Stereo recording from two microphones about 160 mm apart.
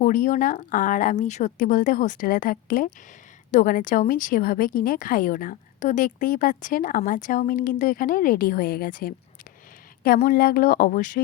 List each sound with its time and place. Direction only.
0.0 s a woman's voice: 55° left (ahead or behind)
10.2 s a woman's voice: 65° left (ahead or behind)